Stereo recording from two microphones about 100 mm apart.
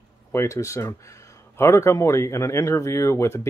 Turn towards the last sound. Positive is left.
turn(degrees=30)  # may be behind; listen again after turning